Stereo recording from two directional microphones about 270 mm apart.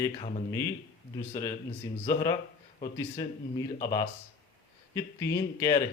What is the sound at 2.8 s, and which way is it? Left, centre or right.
Speech, centre.